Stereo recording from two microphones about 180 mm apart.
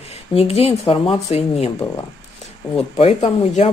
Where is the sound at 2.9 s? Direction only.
35° left (ahead or behind).